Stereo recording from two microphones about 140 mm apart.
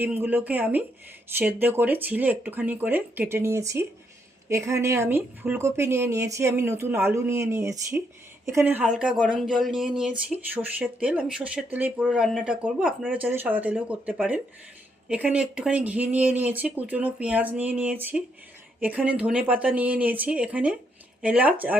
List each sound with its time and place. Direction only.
0.0 s speech: 15° right (ahead or behind)
13.1 s speech: 15° right (ahead or behind)